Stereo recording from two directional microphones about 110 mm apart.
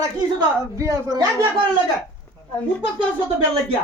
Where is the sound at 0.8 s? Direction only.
35° right (ahead or behind).